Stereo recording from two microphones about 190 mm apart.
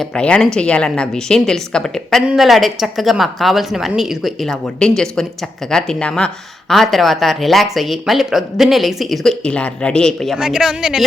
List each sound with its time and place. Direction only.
0.2 s speech: 5° left (ahead or behind)